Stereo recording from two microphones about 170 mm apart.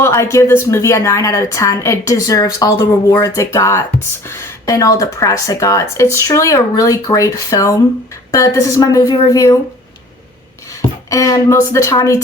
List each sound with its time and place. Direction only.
0.0 s a woman's voice: 15° left (ahead or behind)
11.1 s speech: 20° left (ahead or behind)